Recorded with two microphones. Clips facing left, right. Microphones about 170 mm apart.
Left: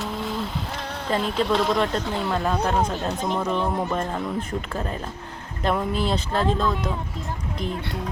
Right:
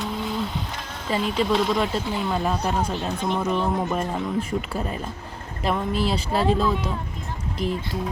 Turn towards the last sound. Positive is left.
turn(degrees=-5)  # may be behind; listen again after turning